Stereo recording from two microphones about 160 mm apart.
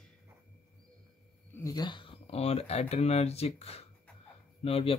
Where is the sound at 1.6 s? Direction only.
25° left (ahead or behind).